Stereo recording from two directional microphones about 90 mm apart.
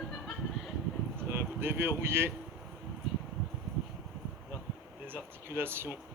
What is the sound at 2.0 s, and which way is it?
Speech, 25° right (ahead or behind).